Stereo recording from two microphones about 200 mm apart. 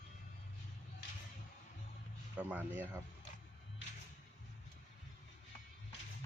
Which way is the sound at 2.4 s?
10° right (ahead or behind).